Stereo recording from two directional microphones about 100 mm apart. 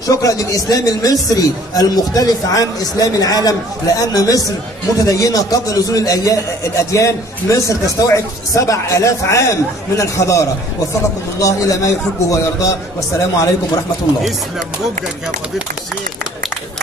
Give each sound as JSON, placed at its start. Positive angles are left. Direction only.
{"t": 0.0, "sound": "a man's voice", "side_deg": 35}